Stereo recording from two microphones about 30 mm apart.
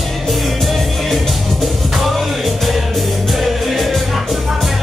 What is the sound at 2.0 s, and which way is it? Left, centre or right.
Music, centre.